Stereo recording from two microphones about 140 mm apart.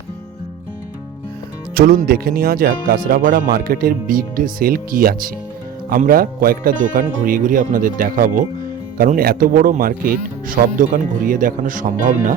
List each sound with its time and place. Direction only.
1.7 s speech: 90° right; by 8.4 s 70° right (ahead or behind)
9.0 s speech: 90° right
10.8 s speech: 70° right (ahead or behind)